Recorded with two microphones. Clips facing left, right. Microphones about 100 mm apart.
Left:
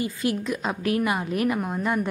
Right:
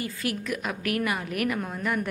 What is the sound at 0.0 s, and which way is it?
A woman's voice, 25° left (ahead or behind).